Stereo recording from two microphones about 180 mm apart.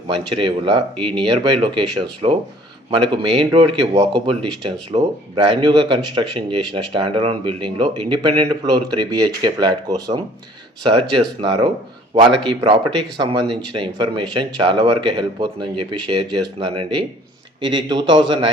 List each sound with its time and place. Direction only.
0.1 s speech: 30° right (ahead or behind)
11.3 s speech: 30° right (ahead or behind)